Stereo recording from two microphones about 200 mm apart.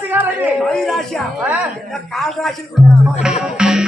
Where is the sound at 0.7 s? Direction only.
Centre (ahead or behind).